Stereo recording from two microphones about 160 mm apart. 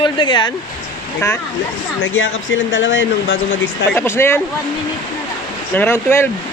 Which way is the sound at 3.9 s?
15° left (ahead or behind).